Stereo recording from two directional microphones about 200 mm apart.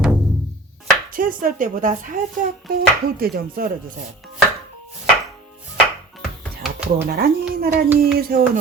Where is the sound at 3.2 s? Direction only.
50° right (ahead or behind).